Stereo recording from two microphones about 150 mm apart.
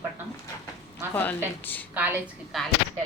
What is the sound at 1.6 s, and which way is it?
Speech, 10° left (ahead or behind).